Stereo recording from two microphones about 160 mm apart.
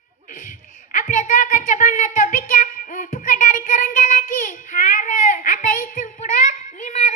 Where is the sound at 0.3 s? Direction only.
55° left (ahead or behind).